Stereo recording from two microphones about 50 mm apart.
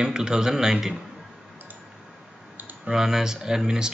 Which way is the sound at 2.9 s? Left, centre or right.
Centre.